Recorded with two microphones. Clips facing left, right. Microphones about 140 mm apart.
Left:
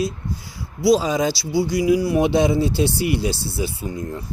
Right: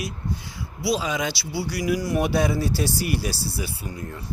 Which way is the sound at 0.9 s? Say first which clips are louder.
Left 7 dB; 40° left (ahead or behind).